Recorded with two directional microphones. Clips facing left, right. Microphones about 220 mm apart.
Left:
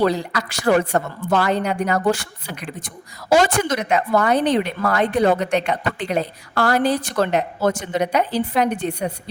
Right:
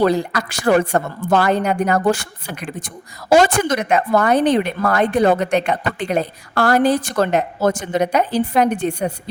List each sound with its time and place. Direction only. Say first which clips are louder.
0.0 s a woman's voice: right 3 dB; 50° right (ahead or behind)